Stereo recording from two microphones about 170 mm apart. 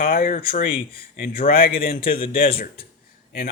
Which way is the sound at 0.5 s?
60° left (ahead or behind).